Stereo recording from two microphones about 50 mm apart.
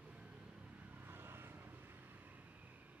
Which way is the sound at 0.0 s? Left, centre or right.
Right.